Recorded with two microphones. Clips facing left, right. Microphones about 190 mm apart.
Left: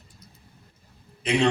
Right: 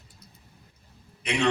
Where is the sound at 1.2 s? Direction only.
30° left (ahead or behind).